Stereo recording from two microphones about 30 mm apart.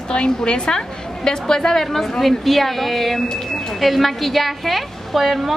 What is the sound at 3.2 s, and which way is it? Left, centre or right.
Speech, left.